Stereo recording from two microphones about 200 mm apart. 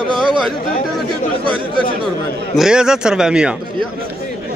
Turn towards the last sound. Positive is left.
turn(degrees=-5)  # may be behind; listen again after turning